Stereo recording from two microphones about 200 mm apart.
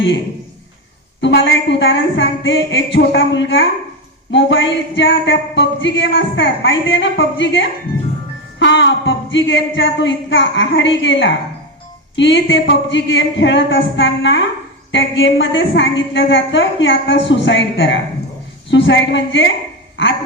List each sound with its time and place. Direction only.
1.2 s a woman's voice: 65° left (ahead or behind)